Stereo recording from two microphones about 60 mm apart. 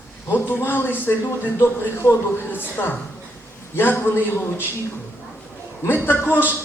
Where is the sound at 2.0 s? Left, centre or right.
Left.